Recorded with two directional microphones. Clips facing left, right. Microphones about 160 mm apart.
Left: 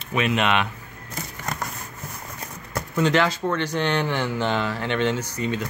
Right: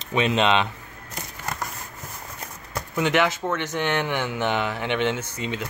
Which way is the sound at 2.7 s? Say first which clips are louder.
Left 2 dB; 15° right (ahead or behind).